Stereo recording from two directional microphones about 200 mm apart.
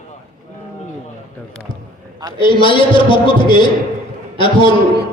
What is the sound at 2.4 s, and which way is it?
A man's voice, 25° left (ahead or behind).